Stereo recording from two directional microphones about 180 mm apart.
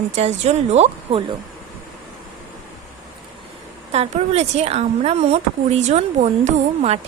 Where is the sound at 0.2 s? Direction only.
35° right (ahead or behind).